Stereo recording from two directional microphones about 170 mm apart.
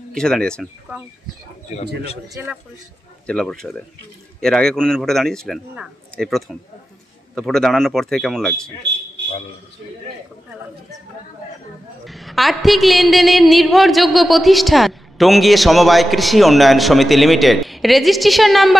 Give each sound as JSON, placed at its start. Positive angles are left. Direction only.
{"t": 0.1, "sound": "speech", "side_deg": 5}
{"t": 2.2, "sound": "speech", "side_deg": -20}
{"t": 3.3, "sound": "a woman's voice", "side_deg": 5}
{"t": 12.0, "sound": "a woman's voice", "side_deg": 0}